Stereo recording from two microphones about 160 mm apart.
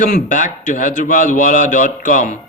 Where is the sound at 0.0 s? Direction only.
55° left (ahead or behind).